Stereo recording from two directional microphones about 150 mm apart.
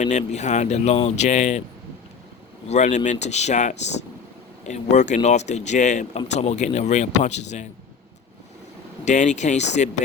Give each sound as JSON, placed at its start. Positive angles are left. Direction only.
{"t": 0.0, "sound": "speech", "side_deg": 50}
{"t": 2.6, "sound": "speech", "side_deg": 50}
{"t": 9.0, "sound": "speech", "side_deg": 50}